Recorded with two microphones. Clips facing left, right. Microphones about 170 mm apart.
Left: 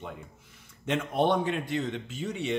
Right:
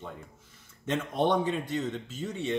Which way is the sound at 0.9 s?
15° left (ahead or behind).